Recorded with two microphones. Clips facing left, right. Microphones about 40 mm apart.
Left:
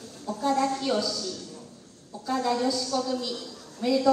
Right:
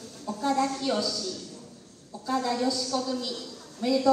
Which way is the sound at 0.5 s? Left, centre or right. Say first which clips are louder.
Left 1 dB; left.